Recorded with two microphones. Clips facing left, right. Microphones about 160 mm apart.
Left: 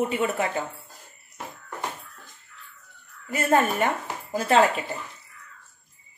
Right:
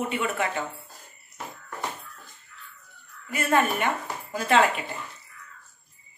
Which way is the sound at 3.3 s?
35° left (ahead or behind).